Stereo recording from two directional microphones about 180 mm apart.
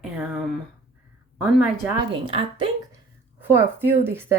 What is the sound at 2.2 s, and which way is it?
Speech, 30° right (ahead or behind).